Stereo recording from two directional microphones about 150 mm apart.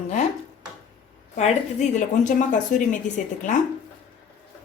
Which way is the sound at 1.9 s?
55° left (ahead or behind).